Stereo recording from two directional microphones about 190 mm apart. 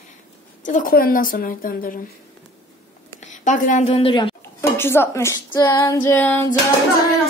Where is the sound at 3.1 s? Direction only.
40° left (ahead or behind).